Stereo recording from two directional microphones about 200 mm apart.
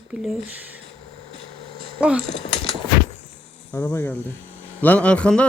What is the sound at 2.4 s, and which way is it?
Speech, 25° left (ahead or behind).